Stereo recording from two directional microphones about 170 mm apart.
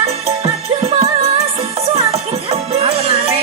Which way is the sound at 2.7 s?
35° right (ahead or behind).